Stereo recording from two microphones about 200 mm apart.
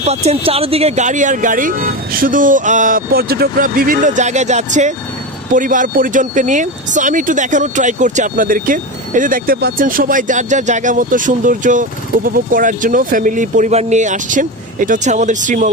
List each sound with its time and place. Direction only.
0.0 s speech: 30° right (ahead or behind)